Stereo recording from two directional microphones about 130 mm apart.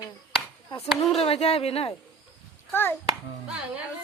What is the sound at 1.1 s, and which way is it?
Speech, 50° left (ahead or behind).